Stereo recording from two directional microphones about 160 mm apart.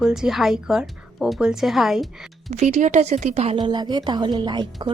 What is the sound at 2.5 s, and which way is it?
A woman's voice, 45° right (ahead or behind).